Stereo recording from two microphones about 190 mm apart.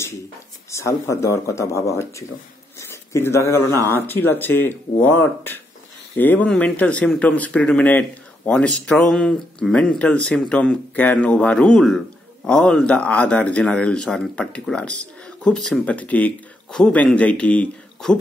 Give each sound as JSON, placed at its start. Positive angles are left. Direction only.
{"t": 0.7, "sound": "speech", "side_deg": 15}